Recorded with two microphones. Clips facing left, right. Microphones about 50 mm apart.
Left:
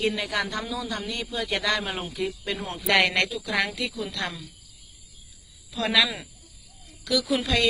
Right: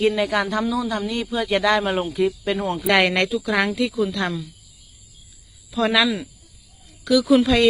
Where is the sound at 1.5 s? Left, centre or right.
Right; by 4.4 s centre.